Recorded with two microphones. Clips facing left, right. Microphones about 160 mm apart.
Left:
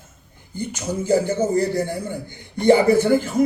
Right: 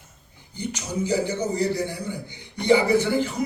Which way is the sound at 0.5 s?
50° left (ahead or behind).